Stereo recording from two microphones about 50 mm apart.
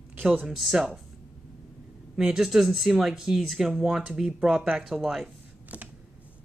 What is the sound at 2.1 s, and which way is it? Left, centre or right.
Speech, centre.